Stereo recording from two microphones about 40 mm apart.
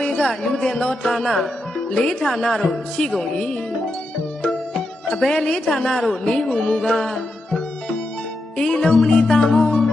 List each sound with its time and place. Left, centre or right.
0.2 s speech: centre
1.9 s speech: centre
3.3 s speech: centre
5.4 s speech: centre
6.1 s music: centre
6.7 s speech: centre
8.5 s speech: centre
9.0 s music: centre